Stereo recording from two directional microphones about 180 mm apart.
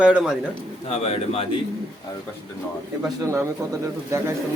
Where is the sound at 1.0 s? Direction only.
30° left (ahead or behind).